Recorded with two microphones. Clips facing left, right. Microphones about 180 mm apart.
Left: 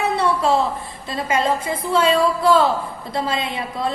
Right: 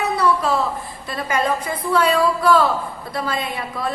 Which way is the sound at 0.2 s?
25° left (ahead or behind).